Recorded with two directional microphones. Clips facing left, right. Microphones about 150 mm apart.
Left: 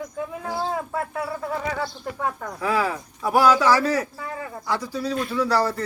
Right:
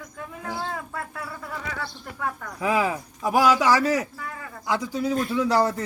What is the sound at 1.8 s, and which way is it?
Speech, 15° left (ahead or behind).